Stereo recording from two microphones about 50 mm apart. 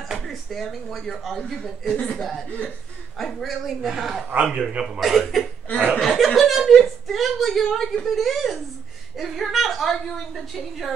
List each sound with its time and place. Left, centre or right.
0.1 s speech: centre
1.9 s speech: left
2.1 s a man's voice: centre
4.7 s a man's voice: centre
5.0 s speech: centre